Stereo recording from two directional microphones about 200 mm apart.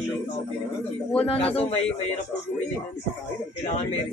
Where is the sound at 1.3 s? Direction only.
30° left (ahead or behind).